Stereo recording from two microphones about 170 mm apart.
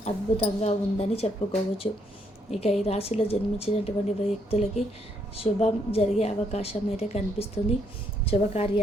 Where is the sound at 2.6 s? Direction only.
40° left (ahead or behind).